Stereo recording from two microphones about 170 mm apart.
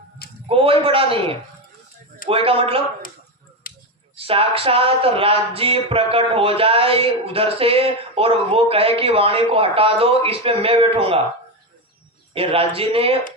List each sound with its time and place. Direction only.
0.4 s speech: 35° right (ahead or behind)
3.6 s a sound: 55° left (ahead or behind)
4.2 s speech: 35° right (ahead or behind)
12.3 s speech: 35° right (ahead or behind)